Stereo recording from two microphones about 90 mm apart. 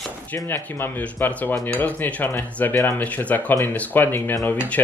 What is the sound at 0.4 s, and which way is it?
Speech, 25° left (ahead or behind).